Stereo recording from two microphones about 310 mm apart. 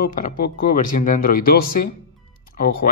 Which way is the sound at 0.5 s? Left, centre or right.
Left.